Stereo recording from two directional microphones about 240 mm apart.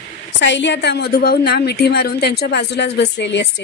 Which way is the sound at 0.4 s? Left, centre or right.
Left.